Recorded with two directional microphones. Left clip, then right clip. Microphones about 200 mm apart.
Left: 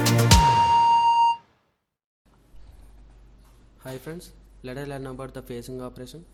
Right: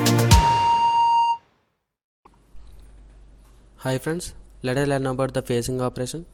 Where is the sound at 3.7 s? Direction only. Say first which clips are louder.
Right 11 dB; 40° right (ahead or behind).